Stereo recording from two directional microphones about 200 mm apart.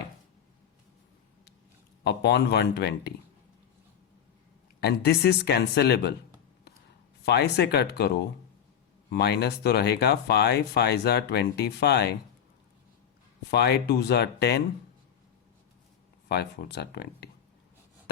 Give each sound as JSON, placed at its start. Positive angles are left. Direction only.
{"t": 2.0, "sound": "speech", "side_deg": 55}
{"t": 4.8, "sound": "speech", "side_deg": 55}
{"t": 7.3, "sound": "speech", "side_deg": 55}
{"t": 13.5, "sound": "speech", "side_deg": 55}
{"t": 16.3, "sound": "speech", "side_deg": 55}